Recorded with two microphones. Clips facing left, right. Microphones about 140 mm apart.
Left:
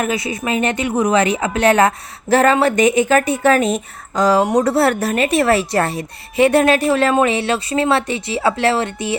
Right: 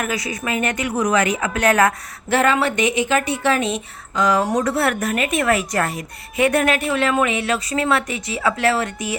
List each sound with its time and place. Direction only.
0.0 s a woman's voice: 25° left (ahead or behind)
2.3 s a woman's voice: 40° left (ahead or behind)